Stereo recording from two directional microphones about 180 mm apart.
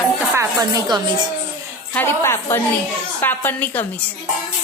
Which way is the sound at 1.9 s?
10° left (ahead or behind).